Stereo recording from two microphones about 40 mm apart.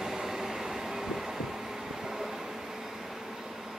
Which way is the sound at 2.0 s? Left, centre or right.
Centre.